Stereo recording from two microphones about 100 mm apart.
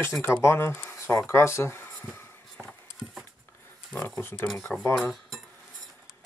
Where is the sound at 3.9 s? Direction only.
20° left (ahead or behind).